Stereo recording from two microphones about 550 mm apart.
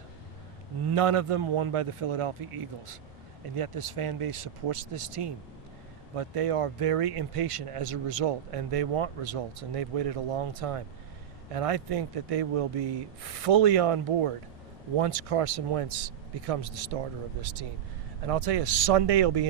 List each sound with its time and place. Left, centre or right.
0.9 s speech: right
17.4 s speech: right